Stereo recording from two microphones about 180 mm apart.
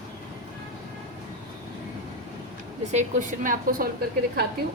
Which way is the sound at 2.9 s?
45° right (ahead or behind).